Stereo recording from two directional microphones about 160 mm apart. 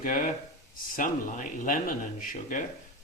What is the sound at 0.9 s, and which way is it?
Speech, 55° left (ahead or behind).